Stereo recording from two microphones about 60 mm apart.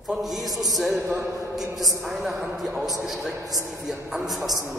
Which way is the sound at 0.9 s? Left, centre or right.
Right.